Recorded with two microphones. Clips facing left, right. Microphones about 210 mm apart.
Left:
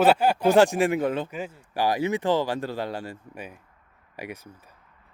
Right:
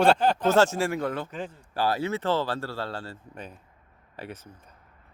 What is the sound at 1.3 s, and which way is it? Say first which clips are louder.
Speech: left 2 dB; 10° left (ahead or behind).